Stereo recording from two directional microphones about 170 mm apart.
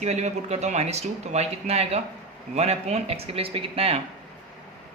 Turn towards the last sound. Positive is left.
turn(degrees=-35)  # may be behind; listen again after turning